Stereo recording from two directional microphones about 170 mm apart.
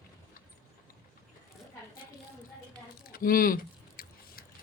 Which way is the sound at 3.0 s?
60° left (ahead or behind).